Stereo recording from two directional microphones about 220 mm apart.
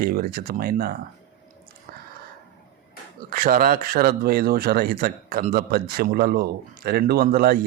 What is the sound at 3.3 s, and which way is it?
Speech, 40° right (ahead or behind).